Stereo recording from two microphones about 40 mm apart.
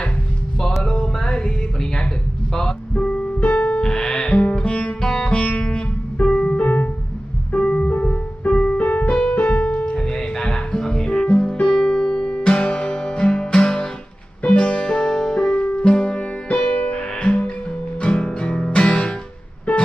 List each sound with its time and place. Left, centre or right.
0.8 s music: centre
3.0 s piano: left
3.4 s music: left
3.8 s music: centre
4.3 s music: left
5.0 s music: centre
5.3 s music: left
6.6 s piano: left
7.5 s music: left; by 15.5 s centre
15.5 s music: left
19.7 s music: left